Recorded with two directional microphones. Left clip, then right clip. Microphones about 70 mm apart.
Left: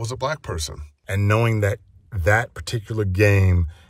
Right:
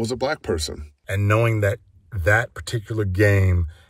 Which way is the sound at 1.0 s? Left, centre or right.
Left.